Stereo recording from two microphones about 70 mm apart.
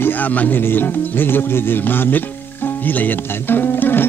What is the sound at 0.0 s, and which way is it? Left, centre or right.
Music, left.